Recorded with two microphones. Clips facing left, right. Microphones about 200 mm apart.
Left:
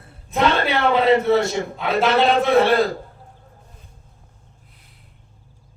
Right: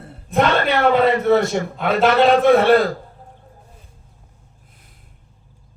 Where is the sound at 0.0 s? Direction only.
55° right (ahead or behind).